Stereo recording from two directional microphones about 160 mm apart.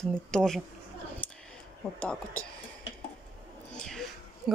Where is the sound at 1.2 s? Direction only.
10° left (ahead or behind).